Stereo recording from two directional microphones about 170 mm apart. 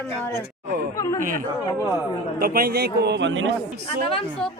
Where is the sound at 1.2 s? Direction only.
55° right (ahead or behind); by 3.5 s 90° right.